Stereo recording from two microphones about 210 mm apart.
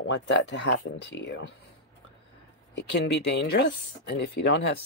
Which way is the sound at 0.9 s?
55° left (ahead or behind).